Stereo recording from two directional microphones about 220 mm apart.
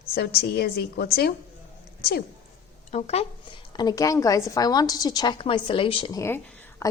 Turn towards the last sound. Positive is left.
turn(degrees=15)  # may be behind; listen again after turning